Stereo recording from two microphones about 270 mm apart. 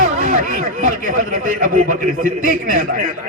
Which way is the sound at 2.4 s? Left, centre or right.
Right.